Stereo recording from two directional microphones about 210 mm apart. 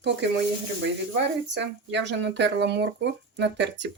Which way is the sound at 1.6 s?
55° right (ahead or behind).